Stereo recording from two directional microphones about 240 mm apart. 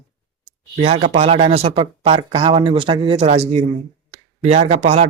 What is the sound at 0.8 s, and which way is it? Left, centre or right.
Speech, right.